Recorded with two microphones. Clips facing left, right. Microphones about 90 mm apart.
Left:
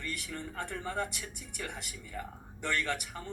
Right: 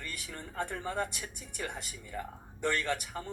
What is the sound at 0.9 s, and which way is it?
Speech, 40° right (ahead or behind).